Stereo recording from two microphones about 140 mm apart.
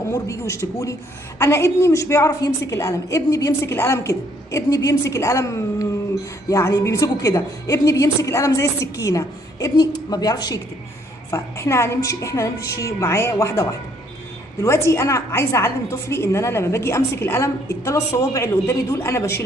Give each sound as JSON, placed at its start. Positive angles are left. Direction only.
{"t": 0.1, "sound": "a woman's voice", "side_deg": 20}